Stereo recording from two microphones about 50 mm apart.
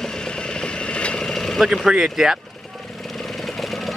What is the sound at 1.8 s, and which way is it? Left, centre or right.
Speech, centre.